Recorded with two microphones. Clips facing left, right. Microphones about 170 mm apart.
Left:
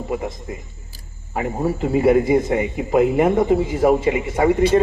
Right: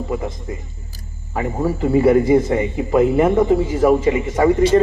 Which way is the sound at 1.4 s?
40° right (ahead or behind).